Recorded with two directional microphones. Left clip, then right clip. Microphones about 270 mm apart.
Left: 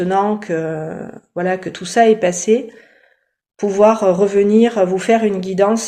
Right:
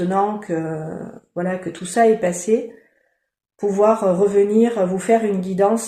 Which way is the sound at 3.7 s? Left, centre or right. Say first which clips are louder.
Left 4 dB; left.